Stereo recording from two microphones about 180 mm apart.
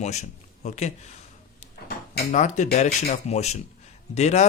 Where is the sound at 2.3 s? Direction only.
45° left (ahead or behind).